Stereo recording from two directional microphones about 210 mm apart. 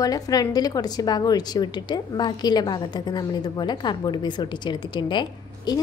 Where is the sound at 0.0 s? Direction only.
15° left (ahead or behind).